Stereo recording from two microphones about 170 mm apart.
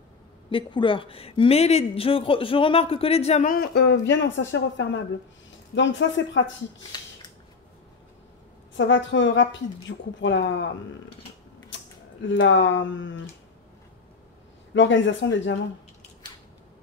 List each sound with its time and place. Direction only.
0.5 s speech: 30° left (ahead or behind)
3.4 s a woman's voice: 65° left (ahead or behind); by 6.5 s 90° left
8.7 s a woman's voice: 90° left
12.3 s a woman's voice: 90° left
14.7 s a woman's voice: 90° left